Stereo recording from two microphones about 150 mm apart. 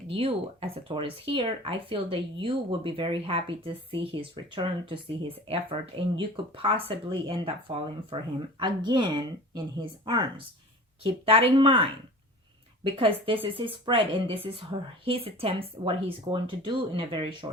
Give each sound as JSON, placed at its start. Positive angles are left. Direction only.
{"t": 0.1, "sound": "speech", "side_deg": -40}